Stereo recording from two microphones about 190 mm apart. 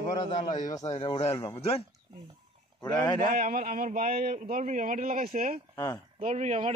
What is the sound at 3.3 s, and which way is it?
A man's voice, 50° right (ahead or behind).